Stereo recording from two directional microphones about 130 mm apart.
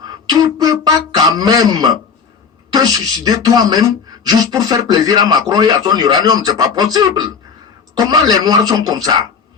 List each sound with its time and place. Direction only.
0.3 s speech: 30° right (ahead or behind)